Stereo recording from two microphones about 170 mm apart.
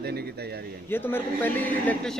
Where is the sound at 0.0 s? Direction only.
70° right (ahead or behind).